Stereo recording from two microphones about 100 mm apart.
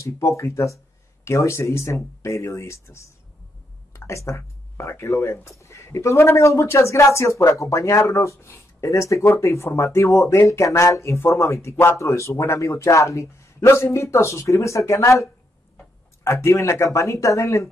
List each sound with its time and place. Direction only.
0.0 s speech: 30° left (ahead or behind)
16.3 s speech: 30° left (ahead or behind)